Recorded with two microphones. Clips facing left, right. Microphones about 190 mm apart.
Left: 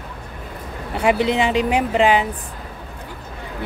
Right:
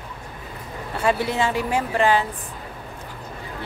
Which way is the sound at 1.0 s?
20° left (ahead or behind).